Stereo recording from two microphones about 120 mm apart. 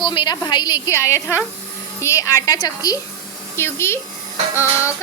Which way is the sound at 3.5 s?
20° left (ahead or behind).